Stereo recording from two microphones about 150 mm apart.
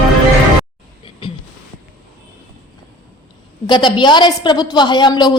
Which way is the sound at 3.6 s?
30° left (ahead or behind).